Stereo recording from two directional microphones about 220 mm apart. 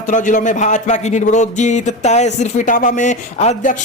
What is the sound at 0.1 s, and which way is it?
Speech, 35° left (ahead or behind).